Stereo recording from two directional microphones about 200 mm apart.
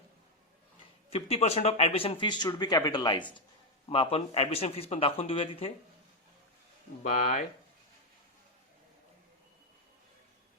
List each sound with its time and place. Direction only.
1.1 s speech: 30° left (ahead or behind)
7.0 s speech: 40° left (ahead or behind)